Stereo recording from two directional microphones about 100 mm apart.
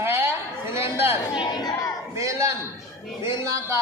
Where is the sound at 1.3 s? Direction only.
50° left (ahead or behind).